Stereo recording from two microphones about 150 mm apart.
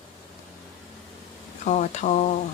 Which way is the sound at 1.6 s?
50° left (ahead or behind).